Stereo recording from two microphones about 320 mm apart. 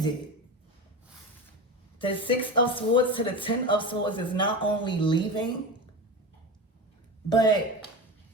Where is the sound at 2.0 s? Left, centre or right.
Centre.